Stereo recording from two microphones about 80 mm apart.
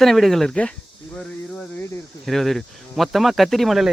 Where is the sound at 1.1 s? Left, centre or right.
Centre.